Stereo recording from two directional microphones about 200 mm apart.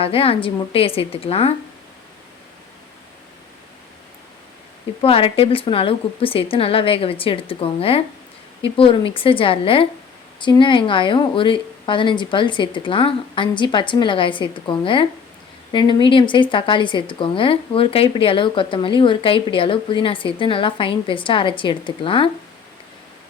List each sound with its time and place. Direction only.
0.0 s speech: 30° left (ahead or behind)
4.9 s speech: 30° left (ahead or behind)